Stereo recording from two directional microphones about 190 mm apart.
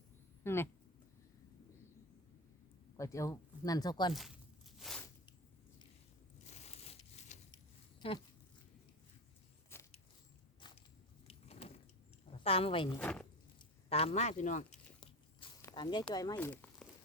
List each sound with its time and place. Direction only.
0.4 s speech: 10° left (ahead or behind)
3.0 s speech: 15° left (ahead or behind)
4.1 s a sound: centre (ahead or behind)
6.4 s crumpling: 35° left (ahead or behind)
8.0 s speech: 30° left (ahead or behind)
9.7 s a sound: 15° left (ahead or behind)
11.3 s a sound: 30° left (ahead or behind)
12.4 s a woman's voice: 30° left (ahead or behind)
12.9 s speech: 5° left (ahead or behind)
13.9 s speech: 30° left (ahead or behind)
15.0 s biting: 20° left (ahead or behind)
16.1 s speech: 20° left (ahead or behind)